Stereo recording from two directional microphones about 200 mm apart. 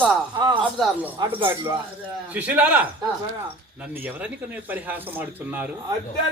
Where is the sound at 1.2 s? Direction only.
20° right (ahead or behind).